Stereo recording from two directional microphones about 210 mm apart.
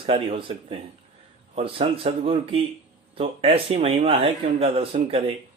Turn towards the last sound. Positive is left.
turn(degrees=-25)  # may be behind; listen again after turning